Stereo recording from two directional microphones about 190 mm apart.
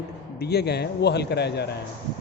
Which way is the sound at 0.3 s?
60° left (ahead or behind).